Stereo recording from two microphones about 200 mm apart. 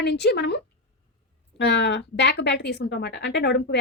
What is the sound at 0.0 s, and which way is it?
Speech, 60° left (ahead or behind).